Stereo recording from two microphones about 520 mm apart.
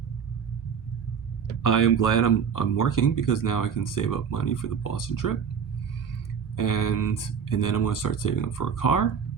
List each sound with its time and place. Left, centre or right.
1.6 s speech: left
6.6 s speech: left